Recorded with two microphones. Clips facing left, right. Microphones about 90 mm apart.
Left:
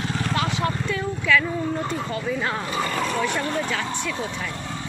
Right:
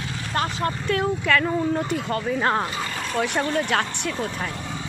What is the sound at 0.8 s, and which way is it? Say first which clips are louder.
Speech: right 2 dB; 55° right (ahead or behind).